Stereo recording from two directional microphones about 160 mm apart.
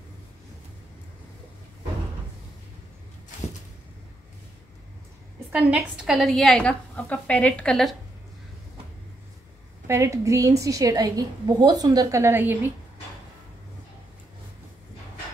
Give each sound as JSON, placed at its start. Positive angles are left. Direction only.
{"t": 5.5, "sound": "a woman's voice", "side_deg": -5}
{"t": 9.8, "sound": "a woman's voice", "side_deg": -20}